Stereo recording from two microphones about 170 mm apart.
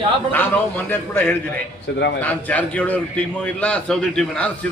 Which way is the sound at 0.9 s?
10° left (ahead or behind).